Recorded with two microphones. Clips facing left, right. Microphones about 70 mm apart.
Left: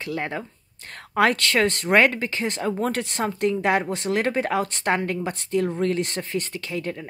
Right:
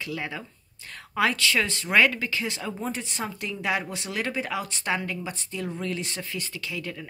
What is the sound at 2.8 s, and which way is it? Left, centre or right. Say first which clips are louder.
A woman's voice: left 7 dB; left.